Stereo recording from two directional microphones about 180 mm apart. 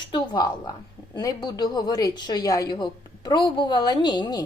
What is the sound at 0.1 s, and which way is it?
A woman's voice, 25° left (ahead or behind).